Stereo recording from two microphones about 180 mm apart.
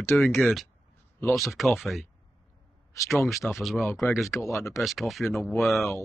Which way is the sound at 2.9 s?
15° left (ahead or behind).